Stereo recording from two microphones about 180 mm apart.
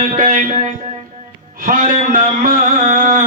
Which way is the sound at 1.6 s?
50° right (ahead or behind).